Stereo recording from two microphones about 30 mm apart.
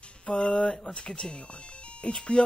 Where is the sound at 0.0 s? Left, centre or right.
Left.